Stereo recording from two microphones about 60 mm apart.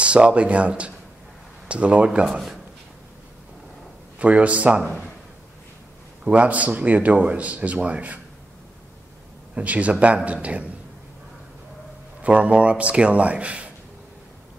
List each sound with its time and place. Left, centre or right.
0.0 s a man's voice: centre
4.2 s a man's voice: right
6.2 s a man's voice: right
9.6 s a man's voice: right
12.2 s a man's voice: right